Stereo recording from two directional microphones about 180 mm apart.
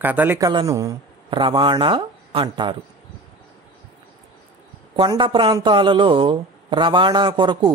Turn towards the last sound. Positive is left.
turn(degrees=-25)  # may be behind; listen again after turning